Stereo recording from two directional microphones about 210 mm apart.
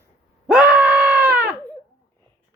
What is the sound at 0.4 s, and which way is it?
Screaming, 5° right (ahead or behind).